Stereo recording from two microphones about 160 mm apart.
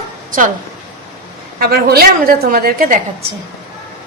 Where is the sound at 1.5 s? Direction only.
65° right (ahead or behind).